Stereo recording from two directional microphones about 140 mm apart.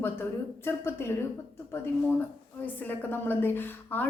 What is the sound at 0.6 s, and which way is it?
Speech, 15° left (ahead or behind).